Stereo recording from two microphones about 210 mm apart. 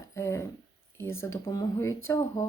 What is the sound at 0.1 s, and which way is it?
Speech, 15° left (ahead or behind).